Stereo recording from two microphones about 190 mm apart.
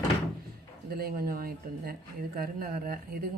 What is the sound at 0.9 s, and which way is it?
Speech, 50° right (ahead or behind).